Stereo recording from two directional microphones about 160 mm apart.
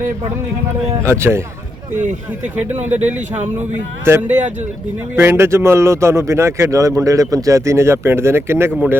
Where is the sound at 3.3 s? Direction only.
45° right (ahead or behind).